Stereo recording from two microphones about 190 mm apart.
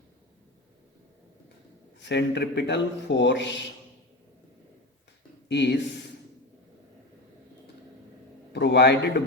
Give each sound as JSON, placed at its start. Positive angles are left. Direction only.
{"t": 2.0, "sound": "speech", "side_deg": 65}
{"t": 5.5, "sound": "speech", "side_deg": 65}
{"t": 8.5, "sound": "a man's voice", "side_deg": 65}